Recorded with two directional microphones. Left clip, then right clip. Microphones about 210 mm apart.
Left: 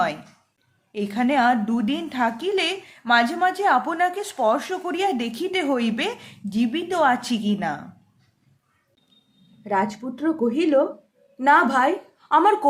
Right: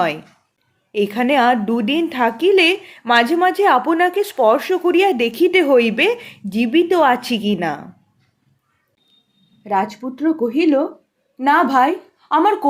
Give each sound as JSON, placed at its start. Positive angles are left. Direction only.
{"t": 0.9, "sound": "a woman's voice", "side_deg": -25}
{"t": 9.6, "sound": "a woman's voice", "side_deg": -25}